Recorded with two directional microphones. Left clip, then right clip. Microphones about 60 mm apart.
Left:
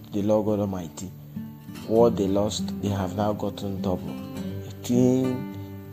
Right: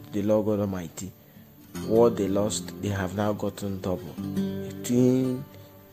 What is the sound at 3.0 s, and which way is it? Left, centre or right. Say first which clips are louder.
Speech: left 1 dB; centre.